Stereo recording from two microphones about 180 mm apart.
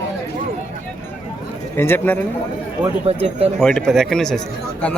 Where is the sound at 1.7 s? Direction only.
10° left (ahead or behind).